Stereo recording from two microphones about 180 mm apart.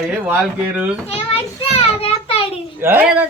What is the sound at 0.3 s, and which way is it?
Speech, 10° right (ahead or behind).